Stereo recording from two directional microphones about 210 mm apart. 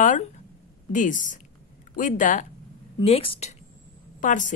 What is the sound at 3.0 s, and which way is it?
A woman's voice, 25° left (ahead or behind).